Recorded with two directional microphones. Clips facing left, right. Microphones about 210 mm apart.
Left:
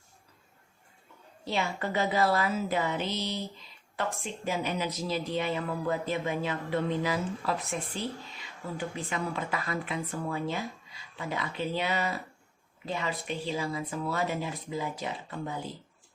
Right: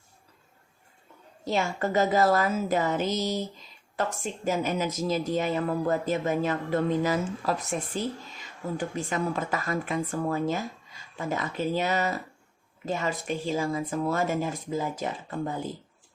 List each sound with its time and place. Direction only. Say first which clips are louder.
1.5 s speech: right 4 dB; 45° right (ahead or behind)